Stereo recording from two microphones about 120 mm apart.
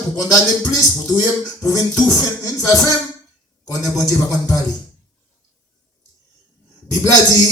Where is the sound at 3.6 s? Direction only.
30° left (ahead or behind).